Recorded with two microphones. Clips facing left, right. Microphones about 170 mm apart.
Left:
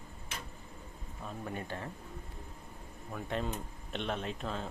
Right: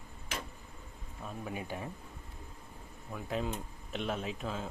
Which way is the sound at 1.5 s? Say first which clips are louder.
Right 1 dB; 10° right (ahead or behind).